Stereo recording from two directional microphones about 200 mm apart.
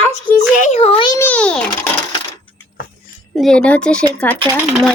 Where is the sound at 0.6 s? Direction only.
30° left (ahead or behind).